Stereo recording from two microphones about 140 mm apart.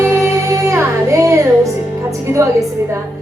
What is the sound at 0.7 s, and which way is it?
Music, 20° right (ahead or behind).